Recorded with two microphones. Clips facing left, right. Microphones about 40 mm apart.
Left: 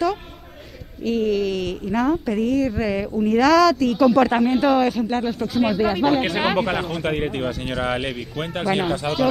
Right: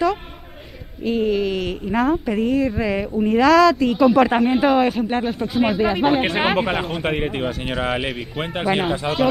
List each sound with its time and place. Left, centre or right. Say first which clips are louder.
1.0 s speech: right 1 dB; right